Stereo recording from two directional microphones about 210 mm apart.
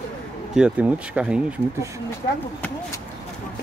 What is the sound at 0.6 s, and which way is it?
Speech, 5° right (ahead or behind).